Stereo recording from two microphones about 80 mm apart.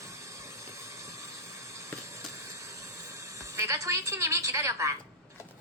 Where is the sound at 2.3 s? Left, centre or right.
Right.